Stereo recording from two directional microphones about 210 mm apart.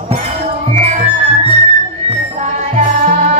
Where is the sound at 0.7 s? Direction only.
30° right (ahead or behind).